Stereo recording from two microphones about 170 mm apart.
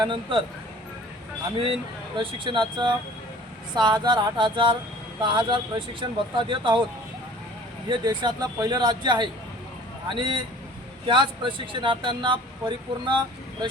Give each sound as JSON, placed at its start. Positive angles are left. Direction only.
{"t": 0.0, "sound": "speech", "side_deg": -30}
{"t": 1.5, "sound": "speech", "side_deg": -30}
{"t": 7.9, "sound": "speech", "side_deg": -25}